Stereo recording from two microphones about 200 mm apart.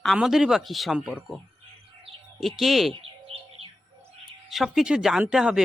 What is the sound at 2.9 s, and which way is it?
Bird, 30° right (ahead or behind).